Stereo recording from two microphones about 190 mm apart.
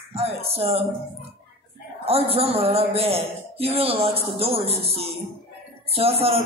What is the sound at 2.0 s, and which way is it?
Speech, 30° right (ahead or behind).